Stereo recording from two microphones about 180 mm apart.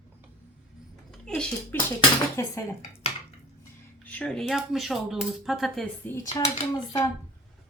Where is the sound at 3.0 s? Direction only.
35° left (ahead or behind).